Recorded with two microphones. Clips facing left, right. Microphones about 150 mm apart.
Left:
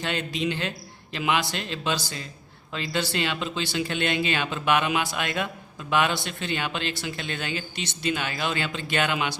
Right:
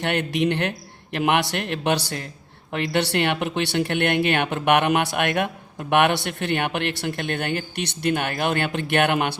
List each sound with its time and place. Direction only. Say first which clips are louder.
0.0 s speech: right 6 dB; 65° right (ahead or behind)